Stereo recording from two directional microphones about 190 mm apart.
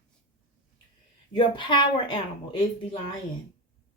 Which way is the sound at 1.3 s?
25° left (ahead or behind).